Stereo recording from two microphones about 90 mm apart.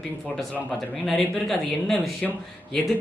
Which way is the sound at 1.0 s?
Centre (ahead or behind).